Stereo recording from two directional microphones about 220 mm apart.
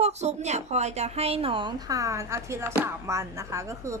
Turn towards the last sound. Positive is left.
turn(degrees=-15)  # may be behind; listen again after turning